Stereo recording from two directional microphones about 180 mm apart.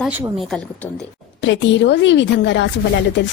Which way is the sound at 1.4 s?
85° left.